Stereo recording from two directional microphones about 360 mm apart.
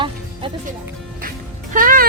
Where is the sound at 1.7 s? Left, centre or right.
Right.